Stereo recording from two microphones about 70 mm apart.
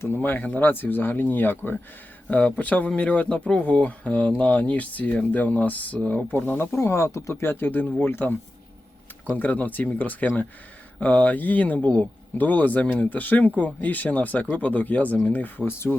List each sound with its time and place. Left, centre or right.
0.0 s speech: left
6.3 s speech: left